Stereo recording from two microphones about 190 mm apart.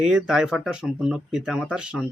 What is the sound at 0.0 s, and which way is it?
Speech, 5° right (ahead or behind).